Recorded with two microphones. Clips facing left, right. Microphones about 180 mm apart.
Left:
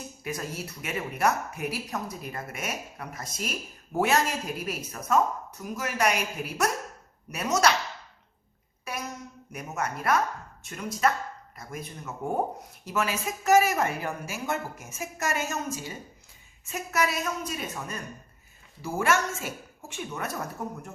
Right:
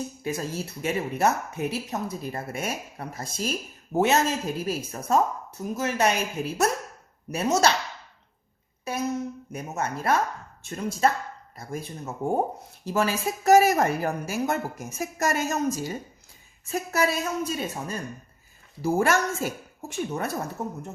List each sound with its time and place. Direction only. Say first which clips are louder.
0.2 s speech: right 1 dB; 25° right (ahead or behind)
8.8 s a sound: right 6 dB; 25° right (ahead or behind)
9.5 s speech: left 2 dB; 25° right (ahead or behind)
20.6 s speech: right 3 dB; 25° right (ahead or behind)